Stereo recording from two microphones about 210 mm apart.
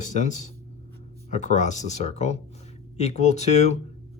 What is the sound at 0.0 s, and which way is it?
A man's voice, 35° left (ahead or behind).